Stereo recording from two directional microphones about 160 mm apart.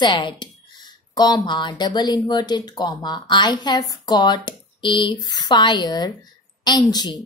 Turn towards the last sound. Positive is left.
turn(degrees=25)  # may be behind; listen again after turning